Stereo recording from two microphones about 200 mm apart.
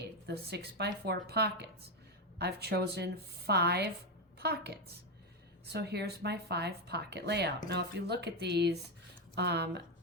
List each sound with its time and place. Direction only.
0.3 s a woman's voice: 55° right (ahead or behind)